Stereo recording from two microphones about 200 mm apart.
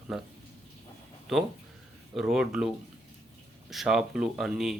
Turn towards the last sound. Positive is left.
turn(degrees=0)  # may be behind; listen again after turning